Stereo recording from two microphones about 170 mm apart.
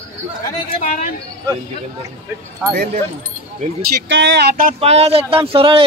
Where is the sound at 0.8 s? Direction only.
55° left (ahead or behind).